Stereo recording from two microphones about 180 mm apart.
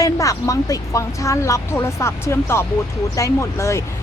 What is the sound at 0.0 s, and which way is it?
Speech, 20° left (ahead or behind).